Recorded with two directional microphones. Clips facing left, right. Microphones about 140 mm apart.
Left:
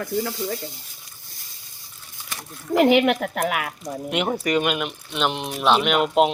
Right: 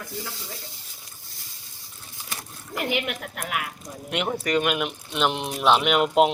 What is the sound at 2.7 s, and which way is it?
Speech, 90° left.